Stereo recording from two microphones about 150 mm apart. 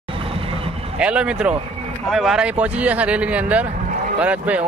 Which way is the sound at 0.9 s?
5° right (ahead or behind).